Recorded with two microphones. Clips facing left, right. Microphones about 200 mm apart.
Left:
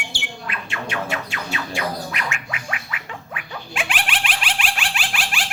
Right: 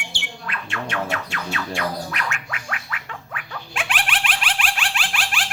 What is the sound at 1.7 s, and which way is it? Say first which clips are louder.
Gargling: left 1 dB; 5° left (ahead or behind).